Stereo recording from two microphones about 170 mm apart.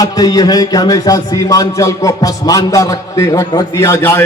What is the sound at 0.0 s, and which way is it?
A man's voice, 20° left (ahead or behind).